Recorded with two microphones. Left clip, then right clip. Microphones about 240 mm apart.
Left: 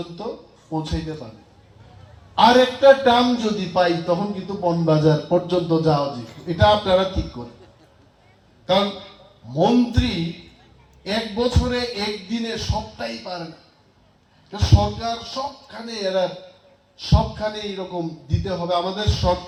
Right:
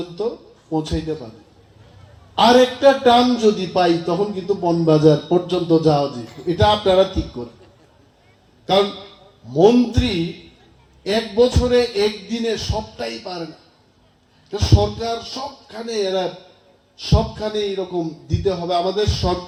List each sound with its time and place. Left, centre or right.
0.7 s a man's voice: right
2.3 s a man's voice: right
8.6 s a man's voice: right
14.5 s a man's voice: right